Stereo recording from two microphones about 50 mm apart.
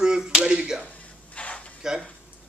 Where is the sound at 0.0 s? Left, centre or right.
Centre.